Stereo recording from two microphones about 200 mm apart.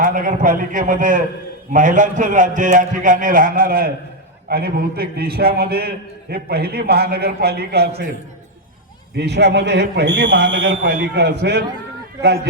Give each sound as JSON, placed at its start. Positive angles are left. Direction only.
{"t": 0.0, "sound": "a man's voice", "side_deg": -45}
{"t": 9.1, "sound": "a man's voice", "side_deg": -55}